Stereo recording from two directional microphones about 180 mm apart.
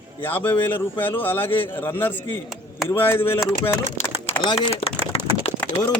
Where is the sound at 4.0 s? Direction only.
35° left (ahead or behind).